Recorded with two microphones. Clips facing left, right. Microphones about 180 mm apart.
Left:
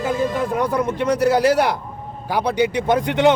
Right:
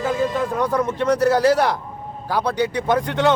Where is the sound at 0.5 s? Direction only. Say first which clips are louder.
Left 1 dB; 15° left (ahead or behind).